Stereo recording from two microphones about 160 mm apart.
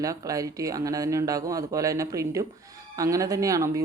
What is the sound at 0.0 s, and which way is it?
Speech, 20° right (ahead or behind).